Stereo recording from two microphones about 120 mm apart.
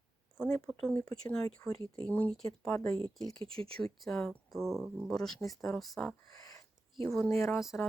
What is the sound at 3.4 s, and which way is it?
Speech, 50° right (ahead or behind).